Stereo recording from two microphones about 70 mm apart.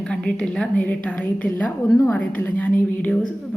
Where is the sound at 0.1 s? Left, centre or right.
Centre.